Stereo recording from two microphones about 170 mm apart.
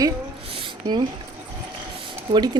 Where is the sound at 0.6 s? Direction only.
30° right (ahead or behind).